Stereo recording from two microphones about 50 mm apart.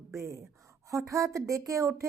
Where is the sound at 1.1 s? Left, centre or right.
Right.